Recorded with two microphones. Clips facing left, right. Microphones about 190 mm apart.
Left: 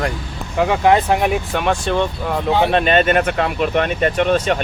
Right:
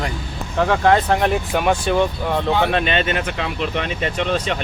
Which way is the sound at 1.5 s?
5° right (ahead or behind).